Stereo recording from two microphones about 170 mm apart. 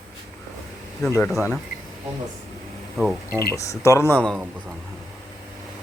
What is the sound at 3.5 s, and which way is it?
Speech, 20° left (ahead or behind).